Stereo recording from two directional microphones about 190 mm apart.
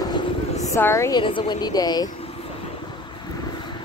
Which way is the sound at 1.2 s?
25° left (ahead or behind).